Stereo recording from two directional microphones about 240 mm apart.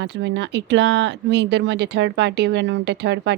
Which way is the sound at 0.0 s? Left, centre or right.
Right.